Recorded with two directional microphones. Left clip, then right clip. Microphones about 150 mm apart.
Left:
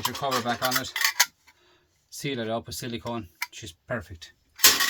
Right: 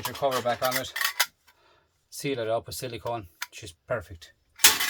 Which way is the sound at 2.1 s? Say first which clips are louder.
Right 2 dB; 25° right (ahead or behind).